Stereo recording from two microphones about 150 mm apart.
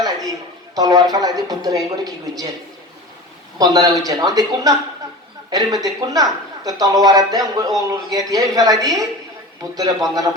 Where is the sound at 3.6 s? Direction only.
25° right (ahead or behind).